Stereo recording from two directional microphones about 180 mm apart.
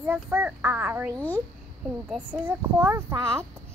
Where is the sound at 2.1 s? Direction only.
10° right (ahead or behind).